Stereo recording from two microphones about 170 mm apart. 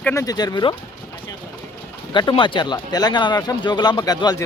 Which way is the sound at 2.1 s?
25° left (ahead or behind).